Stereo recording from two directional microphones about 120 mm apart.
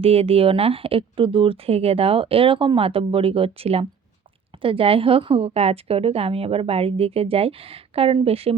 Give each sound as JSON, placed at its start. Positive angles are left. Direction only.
{"t": 0.0, "sound": "a woman's voice", "side_deg": -55}